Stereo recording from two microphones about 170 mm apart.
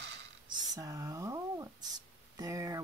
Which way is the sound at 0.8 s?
20° right (ahead or behind).